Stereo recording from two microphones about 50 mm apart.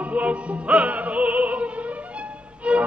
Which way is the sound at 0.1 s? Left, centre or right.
Right.